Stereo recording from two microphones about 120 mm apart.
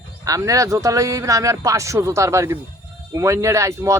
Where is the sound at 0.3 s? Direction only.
30° right (ahead or behind).